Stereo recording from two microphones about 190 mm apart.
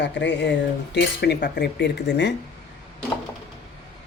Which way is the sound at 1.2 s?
60° left (ahead or behind).